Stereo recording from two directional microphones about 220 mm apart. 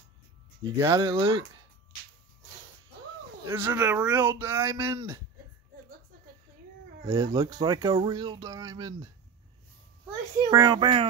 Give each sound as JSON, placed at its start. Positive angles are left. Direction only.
{"t": 0.7, "sound": "a child's voice", "side_deg": -25}
{"t": 3.4, "sound": "speech", "side_deg": -10}
{"t": 7.1, "sound": "a child's voice", "side_deg": -15}